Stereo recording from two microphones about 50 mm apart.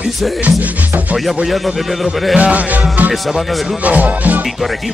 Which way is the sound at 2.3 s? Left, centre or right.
Right.